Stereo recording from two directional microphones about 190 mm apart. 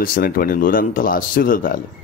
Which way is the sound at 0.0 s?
50° left (ahead or behind).